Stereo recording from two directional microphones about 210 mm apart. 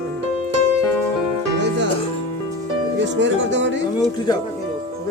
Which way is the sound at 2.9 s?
55° right (ahead or behind).